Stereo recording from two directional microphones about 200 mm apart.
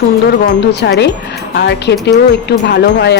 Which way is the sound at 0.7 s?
55° left (ahead or behind).